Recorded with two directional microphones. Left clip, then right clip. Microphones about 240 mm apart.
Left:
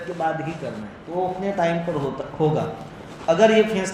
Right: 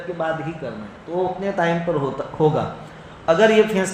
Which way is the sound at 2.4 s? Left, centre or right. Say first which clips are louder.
Right 3 dB; right.